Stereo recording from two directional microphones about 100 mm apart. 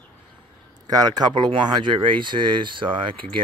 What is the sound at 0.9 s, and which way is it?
Speech, 40° right (ahead or behind).